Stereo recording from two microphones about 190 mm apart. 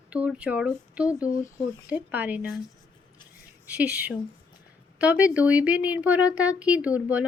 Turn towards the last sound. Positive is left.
turn(degrees=-5)  # may be behind; listen again after turning